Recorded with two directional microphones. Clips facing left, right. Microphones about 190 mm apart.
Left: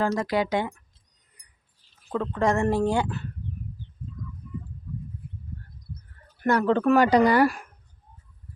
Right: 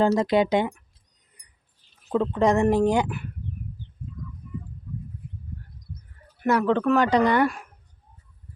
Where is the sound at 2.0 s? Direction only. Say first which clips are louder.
Right 3 dB; 15° right (ahead or behind).